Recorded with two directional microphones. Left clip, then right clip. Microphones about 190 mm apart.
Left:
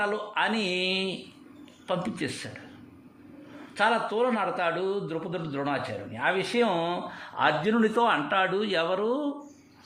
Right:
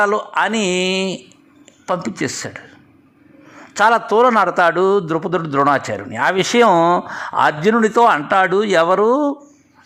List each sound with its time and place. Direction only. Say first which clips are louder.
0.0 s a man's voice: right 11 dB; 35° right (ahead or behind)
3.8 s a man's voice: right 12 dB; 40° right (ahead or behind)